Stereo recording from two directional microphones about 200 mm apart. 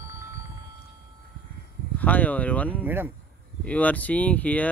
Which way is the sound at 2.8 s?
10° right (ahead or behind).